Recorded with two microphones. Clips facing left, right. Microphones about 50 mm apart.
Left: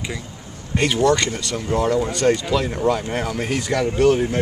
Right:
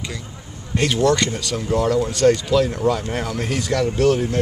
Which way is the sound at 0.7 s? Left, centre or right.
Centre.